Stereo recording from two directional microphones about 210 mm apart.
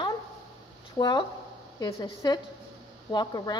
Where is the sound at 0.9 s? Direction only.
20° left (ahead or behind).